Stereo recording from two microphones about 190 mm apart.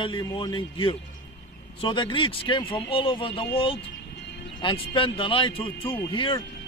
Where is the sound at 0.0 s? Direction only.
20° left (ahead or behind).